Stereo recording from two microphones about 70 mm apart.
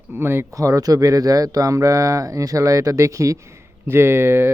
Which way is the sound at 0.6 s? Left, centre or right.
Right.